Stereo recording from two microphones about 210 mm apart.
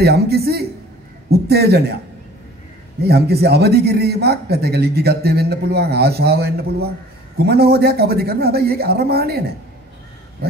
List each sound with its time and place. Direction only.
0.0 s a man's voice: 50° right (ahead or behind)
3.0 s a man's voice: 50° right (ahead or behind)